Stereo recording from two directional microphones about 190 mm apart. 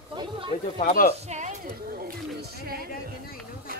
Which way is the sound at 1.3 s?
40° right (ahead or behind).